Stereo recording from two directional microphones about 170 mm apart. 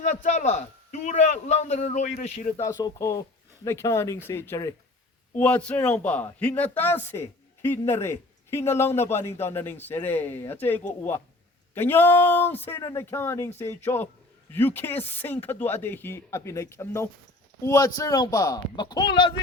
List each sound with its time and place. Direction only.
0.0 s a man's voice: 45° left (ahead or behind)
2.6 s a man's voice: 20° left (ahead or behind)